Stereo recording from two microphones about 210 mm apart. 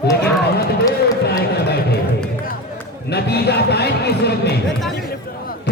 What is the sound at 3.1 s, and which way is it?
Speech, 50° left (ahead or behind).